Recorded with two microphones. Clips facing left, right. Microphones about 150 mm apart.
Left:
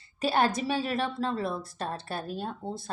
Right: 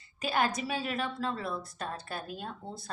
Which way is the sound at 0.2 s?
30° left (ahead or behind).